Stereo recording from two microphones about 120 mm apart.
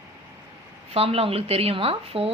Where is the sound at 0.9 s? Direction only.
55° right (ahead or behind).